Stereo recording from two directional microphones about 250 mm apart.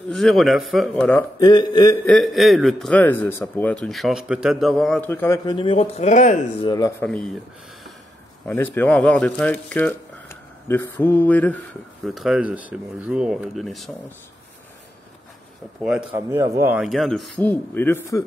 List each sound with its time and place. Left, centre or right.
0.1 s a man's voice: centre
1.5 s a sound: centre
2.0 s a man's voice: centre; by 6.7 s left
6.7 s a sound: centre
7.1 s a man's voice: centre
8.5 s a man's voice: centre
15.8 s a man's voice: centre
16.1 s a man's voice: centre